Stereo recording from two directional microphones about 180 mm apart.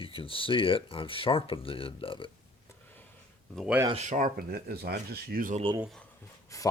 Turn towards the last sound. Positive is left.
turn(degrees=20)  # may be behind; listen again after turning